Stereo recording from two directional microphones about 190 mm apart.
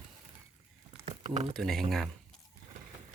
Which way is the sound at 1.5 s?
Centre (ahead or behind).